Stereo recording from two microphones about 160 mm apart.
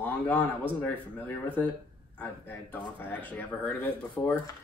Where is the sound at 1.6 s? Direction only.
10° left (ahead or behind).